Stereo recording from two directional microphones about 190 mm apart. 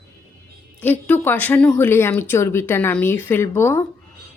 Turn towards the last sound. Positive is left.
turn(degrees=15)  # may be behind; listen again after turning